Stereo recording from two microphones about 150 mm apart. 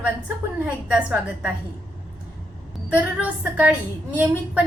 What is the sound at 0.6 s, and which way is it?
Speech, 10° right (ahead or behind).